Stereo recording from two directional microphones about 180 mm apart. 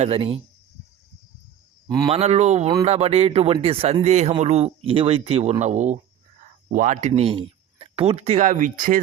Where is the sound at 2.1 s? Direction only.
35° right (ahead or behind).